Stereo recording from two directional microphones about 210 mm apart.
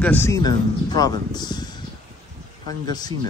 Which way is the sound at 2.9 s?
20° left (ahead or behind).